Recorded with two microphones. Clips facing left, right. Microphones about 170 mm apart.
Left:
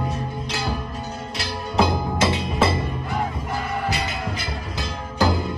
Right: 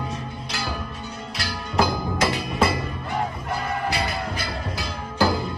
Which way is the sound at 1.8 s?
25° left (ahead or behind).